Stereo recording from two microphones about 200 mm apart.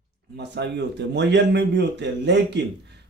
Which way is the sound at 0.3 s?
55° right (ahead or behind).